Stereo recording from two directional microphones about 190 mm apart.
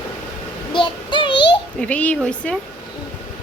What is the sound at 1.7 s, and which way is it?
Speech, 5° left (ahead or behind).